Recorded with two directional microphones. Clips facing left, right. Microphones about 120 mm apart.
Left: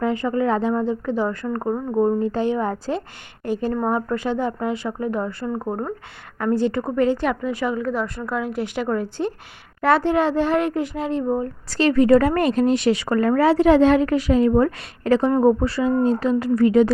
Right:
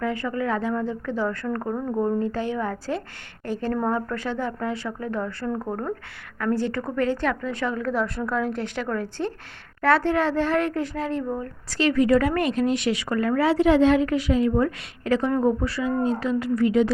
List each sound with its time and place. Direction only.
0.0 s a woman's voice: 20° left (ahead or behind)
11.3 s a woman's voice: 35° left (ahead or behind)